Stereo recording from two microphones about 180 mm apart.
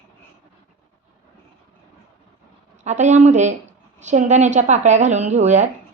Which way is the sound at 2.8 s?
40° right (ahead or behind).